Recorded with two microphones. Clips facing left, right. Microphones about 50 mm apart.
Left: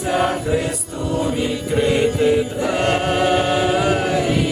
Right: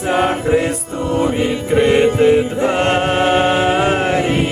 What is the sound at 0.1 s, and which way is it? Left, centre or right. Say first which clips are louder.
Music: right 4 dB; right.